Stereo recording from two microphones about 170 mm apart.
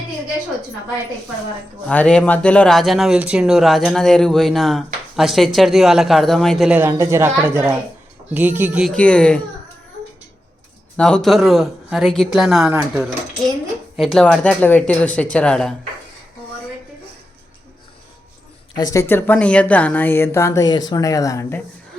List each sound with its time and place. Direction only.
1.9 s speech: 5° left (ahead or behind)
6.7 s a woman's voice: 15° right (ahead or behind)
8.9 s speech: 5° left (ahead or behind)
10.9 s speech: 5° left (ahead or behind)
18.8 s speech: 20° left (ahead or behind)